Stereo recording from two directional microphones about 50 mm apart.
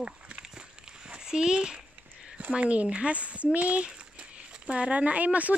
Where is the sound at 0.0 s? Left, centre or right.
Centre.